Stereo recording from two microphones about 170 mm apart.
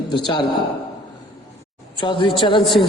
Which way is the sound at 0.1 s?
25° left (ahead or behind).